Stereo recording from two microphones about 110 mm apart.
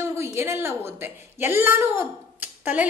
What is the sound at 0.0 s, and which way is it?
A woman's voice, 25° right (ahead or behind).